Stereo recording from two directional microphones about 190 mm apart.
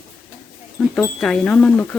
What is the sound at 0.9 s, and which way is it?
Speech, 5° left (ahead or behind).